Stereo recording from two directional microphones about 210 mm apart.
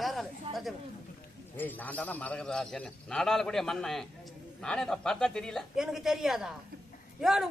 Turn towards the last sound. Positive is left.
turn(degrees=0)  # may be behind; listen again after turning